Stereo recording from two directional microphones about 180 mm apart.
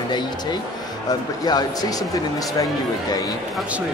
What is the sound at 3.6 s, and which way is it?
Speech, 5° right (ahead or behind).